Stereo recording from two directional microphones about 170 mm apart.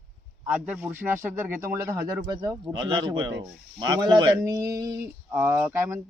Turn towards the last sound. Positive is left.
turn(degrees=-15)  # may be behind; listen again after turning